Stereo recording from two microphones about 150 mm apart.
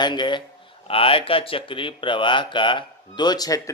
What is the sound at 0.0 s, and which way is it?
Speech, 30° left (ahead or behind).